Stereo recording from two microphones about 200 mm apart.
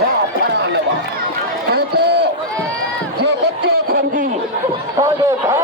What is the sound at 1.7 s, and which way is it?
Crowd, 55° right (ahead or behind).